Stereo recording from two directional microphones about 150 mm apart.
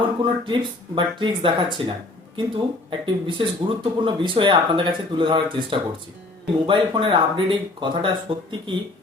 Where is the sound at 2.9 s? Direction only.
35° right (ahead or behind).